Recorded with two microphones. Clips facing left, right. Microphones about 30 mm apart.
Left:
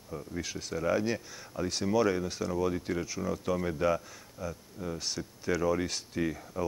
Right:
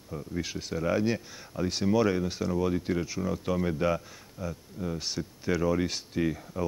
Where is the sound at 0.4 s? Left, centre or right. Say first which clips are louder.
Right 2 dB; centre.